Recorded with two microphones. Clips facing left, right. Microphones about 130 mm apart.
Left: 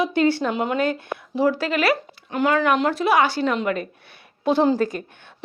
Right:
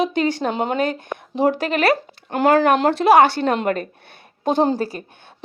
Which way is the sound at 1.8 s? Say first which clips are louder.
Right 3 dB; 55° right (ahead or behind).